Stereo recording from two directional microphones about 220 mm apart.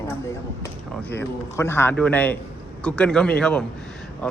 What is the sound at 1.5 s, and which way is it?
A man's voice, 10° left (ahead or behind).